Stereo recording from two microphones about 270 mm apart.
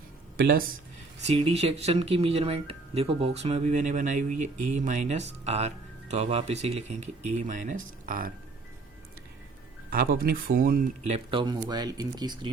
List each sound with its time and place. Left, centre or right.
0.3 s speech: right
1.3 s speech: right
9.9 s speech: right; by 12.5 s centre